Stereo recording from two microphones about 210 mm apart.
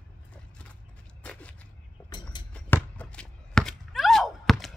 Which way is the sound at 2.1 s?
20° left (ahead or behind).